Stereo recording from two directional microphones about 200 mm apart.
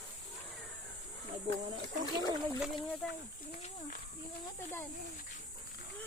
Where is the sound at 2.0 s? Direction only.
20° left (ahead or behind).